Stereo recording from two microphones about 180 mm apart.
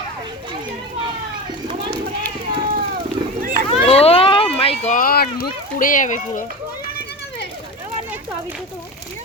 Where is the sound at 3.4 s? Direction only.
50° right (ahead or behind).